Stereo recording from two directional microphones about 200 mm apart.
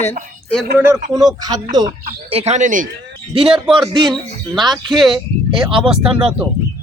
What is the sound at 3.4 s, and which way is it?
Speech, centre (ahead or behind).